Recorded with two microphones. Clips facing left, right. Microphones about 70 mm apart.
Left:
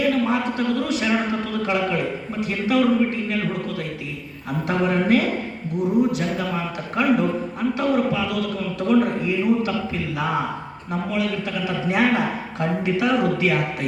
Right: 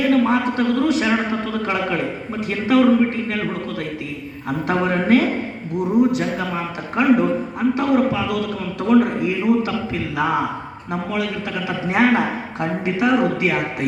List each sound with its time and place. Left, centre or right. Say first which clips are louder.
0.1 s a man's voice: right 4 dB; right
4.6 s a man's voice: right 1 dB; right